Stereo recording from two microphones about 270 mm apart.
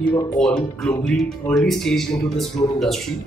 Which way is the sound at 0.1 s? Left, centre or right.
Centre.